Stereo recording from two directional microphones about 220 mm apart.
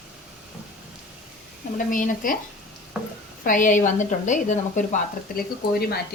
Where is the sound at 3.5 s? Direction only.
35° left (ahead or behind).